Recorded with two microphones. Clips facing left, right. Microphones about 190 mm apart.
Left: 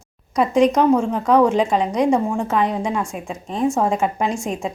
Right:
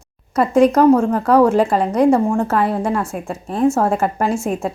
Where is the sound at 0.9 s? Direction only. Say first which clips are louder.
Right 4 dB; 15° left (ahead or behind).